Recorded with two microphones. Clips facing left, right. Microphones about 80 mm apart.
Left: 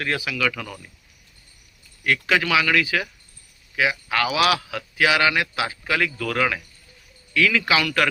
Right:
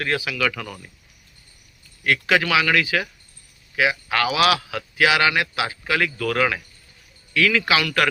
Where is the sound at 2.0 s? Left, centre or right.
Right.